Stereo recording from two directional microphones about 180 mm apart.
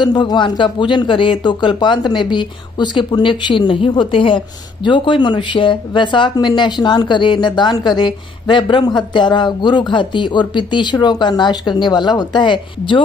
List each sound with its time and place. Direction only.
0.0 s speech: 25° left (ahead or behind)